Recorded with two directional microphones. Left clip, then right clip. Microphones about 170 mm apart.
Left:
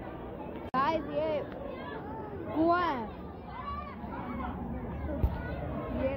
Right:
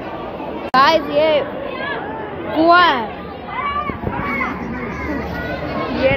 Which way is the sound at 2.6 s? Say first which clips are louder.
Right 17 dB; 20° left (ahead or behind).